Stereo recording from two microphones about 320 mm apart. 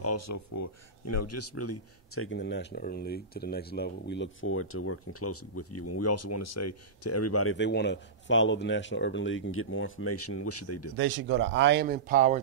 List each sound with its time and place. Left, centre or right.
0.0 s speech: left
11.0 s speech: right